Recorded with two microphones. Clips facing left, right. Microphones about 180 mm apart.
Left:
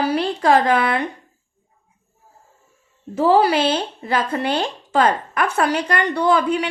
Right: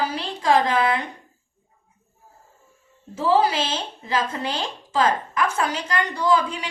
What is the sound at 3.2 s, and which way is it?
Speech, 65° left (ahead or behind).